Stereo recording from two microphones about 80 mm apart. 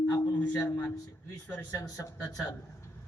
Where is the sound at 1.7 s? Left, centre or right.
Left.